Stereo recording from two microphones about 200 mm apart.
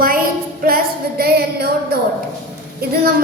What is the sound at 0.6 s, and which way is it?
Singing, 50° right (ahead or behind).